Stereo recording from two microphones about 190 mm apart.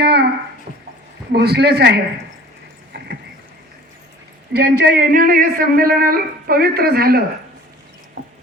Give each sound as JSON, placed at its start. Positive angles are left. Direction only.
{"t": 0.0, "sound": "a sound", "side_deg": -60}
{"t": 1.3, "sound": "a man's voice", "side_deg": -60}
{"t": 4.5, "sound": "a man's voice", "side_deg": -50}